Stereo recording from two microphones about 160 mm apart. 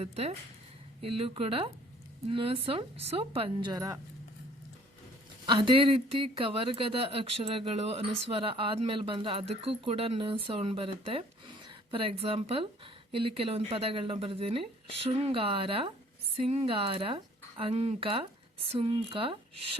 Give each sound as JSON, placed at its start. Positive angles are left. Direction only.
{"t": 0.0, "sound": "speech", "side_deg": -40}
{"t": 5.5, "sound": "speech", "side_deg": -30}